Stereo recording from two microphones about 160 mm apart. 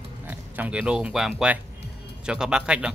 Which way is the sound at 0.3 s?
10° right (ahead or behind).